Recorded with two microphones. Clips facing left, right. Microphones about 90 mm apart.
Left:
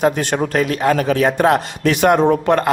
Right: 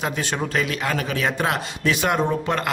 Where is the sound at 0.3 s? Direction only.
45° left (ahead or behind).